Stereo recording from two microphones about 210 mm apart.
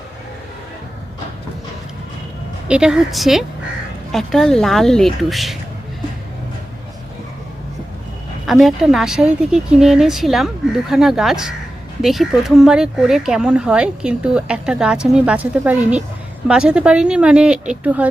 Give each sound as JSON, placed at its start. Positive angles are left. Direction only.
{"t": 2.6, "sound": "speech", "side_deg": -5}
{"t": 8.4, "sound": "speech", "side_deg": 0}